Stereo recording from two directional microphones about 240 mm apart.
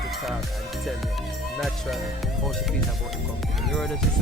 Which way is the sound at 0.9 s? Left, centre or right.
Centre.